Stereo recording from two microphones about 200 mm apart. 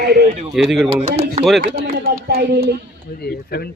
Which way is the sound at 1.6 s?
50° right (ahead or behind).